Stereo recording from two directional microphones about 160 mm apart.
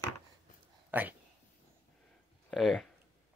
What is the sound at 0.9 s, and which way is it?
Speech, 10° right (ahead or behind).